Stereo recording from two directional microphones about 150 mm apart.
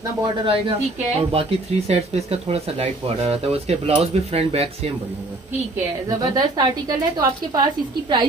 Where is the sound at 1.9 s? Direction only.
45° right (ahead or behind).